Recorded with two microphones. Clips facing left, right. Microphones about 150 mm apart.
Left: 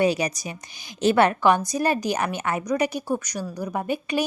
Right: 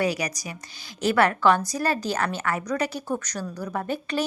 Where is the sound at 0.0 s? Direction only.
25° left (ahead or behind).